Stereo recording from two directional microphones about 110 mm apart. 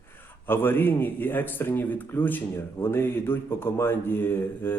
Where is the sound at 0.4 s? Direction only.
20° left (ahead or behind).